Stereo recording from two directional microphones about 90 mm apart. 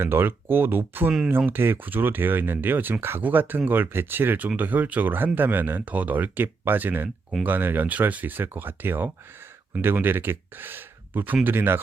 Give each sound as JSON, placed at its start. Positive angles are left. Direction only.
{"t": 0.0, "sound": "speech", "side_deg": -25}